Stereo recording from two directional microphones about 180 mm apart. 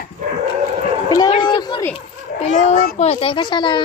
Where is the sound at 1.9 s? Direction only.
35° left (ahead or behind).